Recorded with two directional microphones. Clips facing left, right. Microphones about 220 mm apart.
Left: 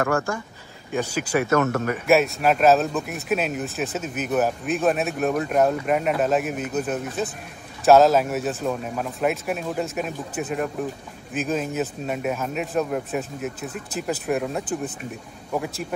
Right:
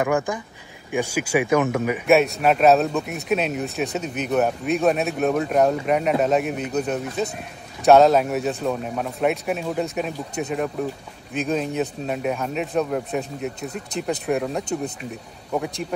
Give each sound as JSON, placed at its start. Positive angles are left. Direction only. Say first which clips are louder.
{"t": 0.0, "sound": "speech", "louder": "right 1 dB", "side_deg": -15}
{"t": 2.0, "sound": "speech", "louder": "right 1 dB", "side_deg": 0}